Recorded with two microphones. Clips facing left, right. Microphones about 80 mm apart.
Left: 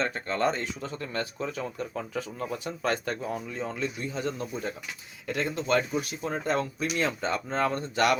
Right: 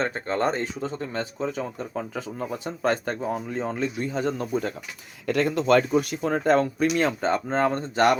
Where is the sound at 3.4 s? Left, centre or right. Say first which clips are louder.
Right 5 dB; right.